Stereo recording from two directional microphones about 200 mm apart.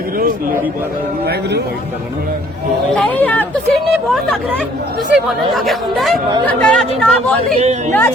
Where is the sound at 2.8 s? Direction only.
5° left (ahead or behind).